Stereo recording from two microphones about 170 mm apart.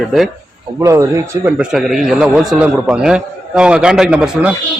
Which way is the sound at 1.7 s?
Centre (ahead or behind).